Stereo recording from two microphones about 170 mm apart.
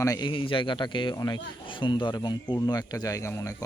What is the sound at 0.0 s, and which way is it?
Speech, 25° left (ahead or behind).